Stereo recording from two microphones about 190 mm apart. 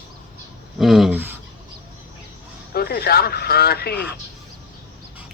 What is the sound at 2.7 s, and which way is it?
Speech, 55° left (ahead or behind).